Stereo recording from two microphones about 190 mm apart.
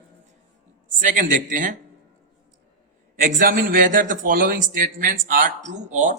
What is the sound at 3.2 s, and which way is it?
A man's voice, 45° right (ahead or behind).